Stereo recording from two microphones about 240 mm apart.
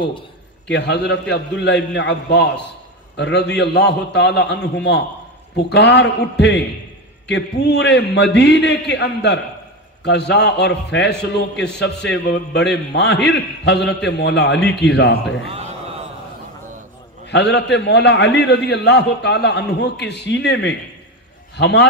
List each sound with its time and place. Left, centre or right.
0.7 s a man's voice: left
5.7 s a man's voice: left
15.4 s a man's voice: right
17.3 s a man's voice: left